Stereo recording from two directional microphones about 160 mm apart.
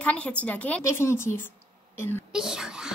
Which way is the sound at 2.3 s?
5° right (ahead or behind).